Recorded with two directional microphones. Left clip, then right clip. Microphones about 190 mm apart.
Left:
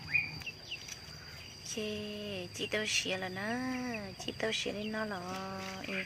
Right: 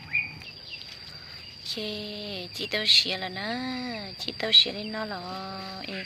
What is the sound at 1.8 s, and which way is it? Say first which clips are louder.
Speech: right 1 dB; 5° right (ahead or behind).